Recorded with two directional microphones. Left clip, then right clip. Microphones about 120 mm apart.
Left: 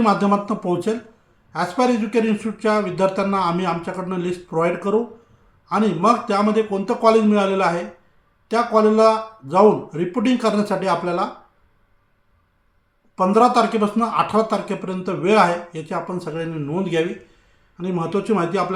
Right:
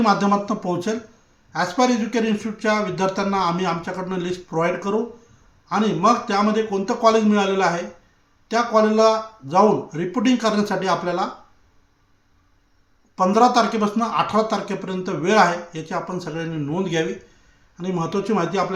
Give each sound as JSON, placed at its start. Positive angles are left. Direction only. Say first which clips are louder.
{"t": 0.0, "sound": "a man's voice", "louder": "even", "side_deg": -5}
{"t": 13.1, "sound": "a man's voice", "louder": "left 1 dB", "side_deg": -5}